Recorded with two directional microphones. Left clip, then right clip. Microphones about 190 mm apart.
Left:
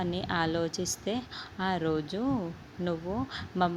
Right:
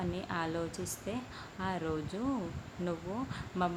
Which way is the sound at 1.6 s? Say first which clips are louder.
Left 6 dB; 30° left (ahead or behind).